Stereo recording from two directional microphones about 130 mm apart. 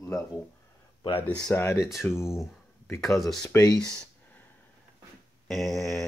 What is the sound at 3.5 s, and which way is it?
Speech, 30° left (ahead or behind).